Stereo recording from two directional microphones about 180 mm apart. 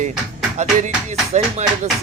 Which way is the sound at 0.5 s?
40° right (ahead or behind).